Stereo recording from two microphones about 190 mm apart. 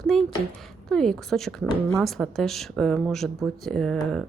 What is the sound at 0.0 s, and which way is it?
A woman's voice, centre (ahead or behind).